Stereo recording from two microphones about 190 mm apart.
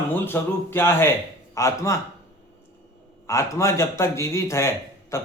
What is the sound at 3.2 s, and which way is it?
Speech, 15° left (ahead or behind).